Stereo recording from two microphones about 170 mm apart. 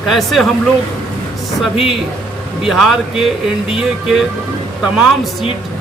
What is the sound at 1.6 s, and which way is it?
Speech, centre (ahead or behind).